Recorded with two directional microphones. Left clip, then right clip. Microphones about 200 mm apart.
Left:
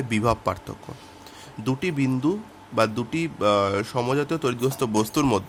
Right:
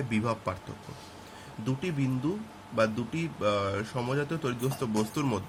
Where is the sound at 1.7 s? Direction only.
55° left (ahead or behind).